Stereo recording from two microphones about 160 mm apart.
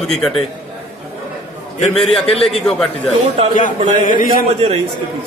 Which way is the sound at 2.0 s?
Centre (ahead or behind).